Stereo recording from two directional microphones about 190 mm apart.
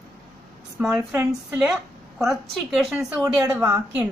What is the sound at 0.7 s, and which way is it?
A woman's voice, 10° right (ahead or behind).